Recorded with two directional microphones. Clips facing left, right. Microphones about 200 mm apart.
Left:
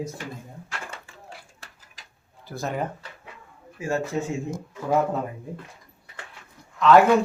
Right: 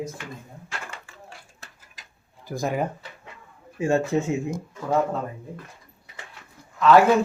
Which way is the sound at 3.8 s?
25° right (ahead or behind).